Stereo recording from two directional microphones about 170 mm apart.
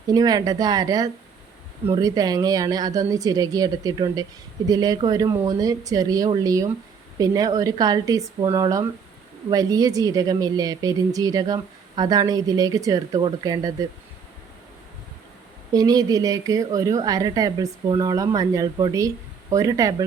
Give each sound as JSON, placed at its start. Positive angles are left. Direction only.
{"t": 0.1, "sound": "a woman's voice", "side_deg": -20}
{"t": 15.7, "sound": "a woman's voice", "side_deg": -20}